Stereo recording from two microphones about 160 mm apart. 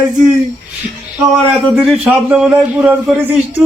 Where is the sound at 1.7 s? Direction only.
5° right (ahead or behind).